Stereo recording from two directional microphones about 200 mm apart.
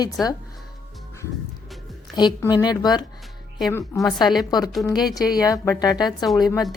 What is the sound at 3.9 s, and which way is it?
Speech, centre (ahead or behind).